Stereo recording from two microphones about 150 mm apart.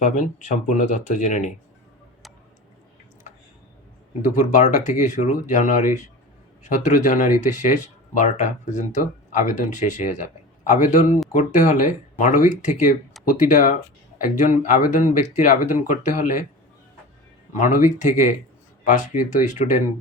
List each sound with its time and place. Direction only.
0.0 s speech: 55° left (ahead or behind)
4.2 s speech: 55° left (ahead or behind)
17.5 s speech: 60° left (ahead or behind)